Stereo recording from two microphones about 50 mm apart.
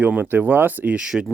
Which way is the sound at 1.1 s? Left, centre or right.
Centre.